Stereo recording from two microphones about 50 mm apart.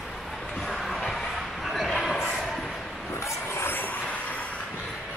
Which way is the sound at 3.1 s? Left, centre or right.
Left.